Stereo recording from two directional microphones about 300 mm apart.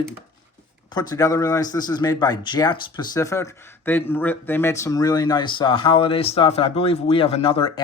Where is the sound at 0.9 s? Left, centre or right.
Centre.